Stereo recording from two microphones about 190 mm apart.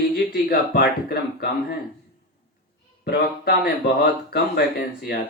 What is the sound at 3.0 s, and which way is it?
Speech, 60° left (ahead or behind).